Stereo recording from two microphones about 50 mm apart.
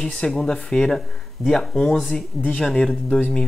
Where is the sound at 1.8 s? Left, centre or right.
Centre.